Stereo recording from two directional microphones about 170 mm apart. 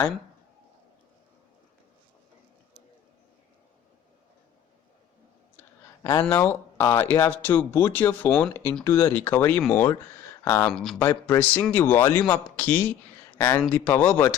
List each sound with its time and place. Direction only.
6.0 s speech: 20° left (ahead or behind)
10.7 s speech: centre (ahead or behind)
11.0 s speech: 10° left (ahead or behind)